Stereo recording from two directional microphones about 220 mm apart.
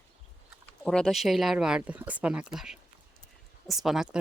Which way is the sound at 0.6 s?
5° left (ahead or behind).